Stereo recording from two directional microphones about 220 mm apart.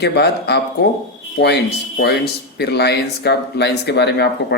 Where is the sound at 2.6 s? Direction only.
50° left (ahead or behind).